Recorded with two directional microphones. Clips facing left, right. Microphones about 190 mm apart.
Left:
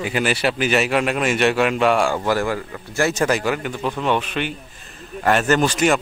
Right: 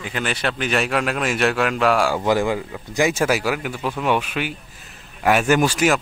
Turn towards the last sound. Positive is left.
turn(degrees=-5)  # may be behind; listen again after turning